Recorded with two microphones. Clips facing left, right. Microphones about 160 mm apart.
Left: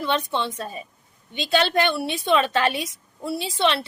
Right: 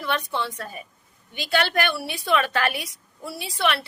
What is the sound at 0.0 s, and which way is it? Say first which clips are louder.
A woman's voice: left 3 dB; 20° left (ahead or behind).